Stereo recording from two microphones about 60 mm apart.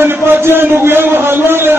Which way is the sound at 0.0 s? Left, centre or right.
Right.